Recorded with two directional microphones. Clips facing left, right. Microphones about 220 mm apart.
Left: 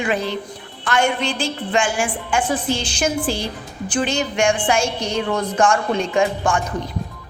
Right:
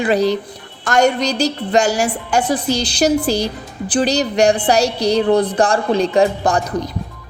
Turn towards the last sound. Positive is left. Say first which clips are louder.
# right 4 dB
turn(degrees=-35)  # may be behind; listen again after turning